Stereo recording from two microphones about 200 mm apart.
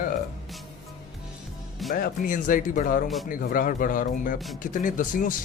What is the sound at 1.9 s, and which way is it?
Speech, 45° left (ahead or behind).